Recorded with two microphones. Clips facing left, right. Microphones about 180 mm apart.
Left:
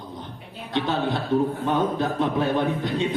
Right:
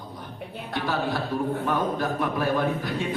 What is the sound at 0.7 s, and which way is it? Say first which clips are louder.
Speech: left 3 dB; 20° left (ahead or behind).